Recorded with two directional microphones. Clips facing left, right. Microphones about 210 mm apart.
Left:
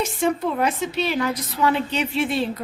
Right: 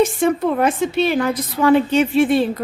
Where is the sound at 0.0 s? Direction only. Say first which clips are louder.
Right 6 dB; 55° right (ahead or behind).